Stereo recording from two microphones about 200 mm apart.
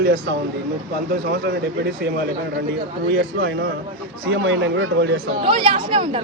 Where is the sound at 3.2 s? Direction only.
55° right (ahead or behind).